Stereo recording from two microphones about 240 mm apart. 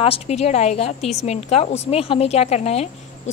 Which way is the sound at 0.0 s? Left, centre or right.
Left.